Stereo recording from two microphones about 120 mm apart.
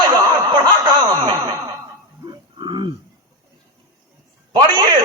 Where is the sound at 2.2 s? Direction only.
40° right (ahead or behind).